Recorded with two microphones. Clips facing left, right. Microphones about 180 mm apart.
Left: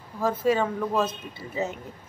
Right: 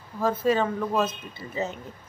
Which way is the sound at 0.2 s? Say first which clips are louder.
Even; 10° left (ahead or behind).